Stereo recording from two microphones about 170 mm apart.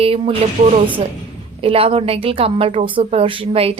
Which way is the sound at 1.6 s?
35° right (ahead or behind).